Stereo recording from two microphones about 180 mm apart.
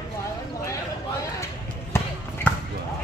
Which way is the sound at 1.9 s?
15° left (ahead or behind).